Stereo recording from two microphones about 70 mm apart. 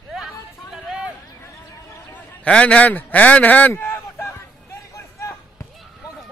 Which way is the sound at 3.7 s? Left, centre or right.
Left.